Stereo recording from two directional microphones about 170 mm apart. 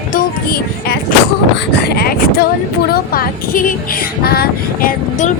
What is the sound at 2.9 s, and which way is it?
Speech, 60° left (ahead or behind).